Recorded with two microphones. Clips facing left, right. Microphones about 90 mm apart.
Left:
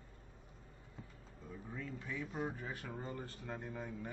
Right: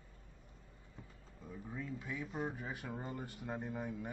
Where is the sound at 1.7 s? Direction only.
10° right (ahead or behind).